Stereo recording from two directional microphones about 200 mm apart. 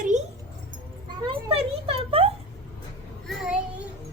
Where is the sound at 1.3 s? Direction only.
25° right (ahead or behind).